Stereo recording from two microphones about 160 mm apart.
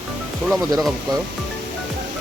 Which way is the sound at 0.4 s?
Centre (ahead or behind).